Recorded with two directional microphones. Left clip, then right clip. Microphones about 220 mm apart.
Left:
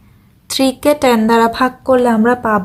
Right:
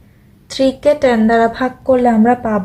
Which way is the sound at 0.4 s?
45° left (ahead or behind).